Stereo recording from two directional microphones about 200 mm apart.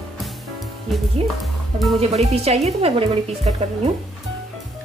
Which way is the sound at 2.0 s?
30° right (ahead or behind).